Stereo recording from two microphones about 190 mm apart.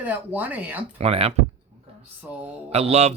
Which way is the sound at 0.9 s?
30° right (ahead or behind).